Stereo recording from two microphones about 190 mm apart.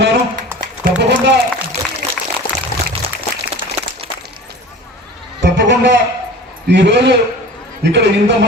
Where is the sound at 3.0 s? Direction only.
30° right (ahead or behind).